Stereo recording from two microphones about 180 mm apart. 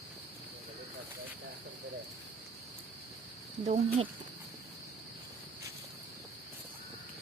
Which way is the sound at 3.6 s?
40° right (ahead or behind).